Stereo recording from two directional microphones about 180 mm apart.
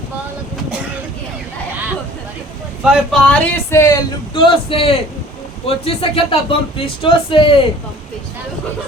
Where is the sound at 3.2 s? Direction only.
10° left (ahead or behind); by 7.5 s 30° left (ahead or behind).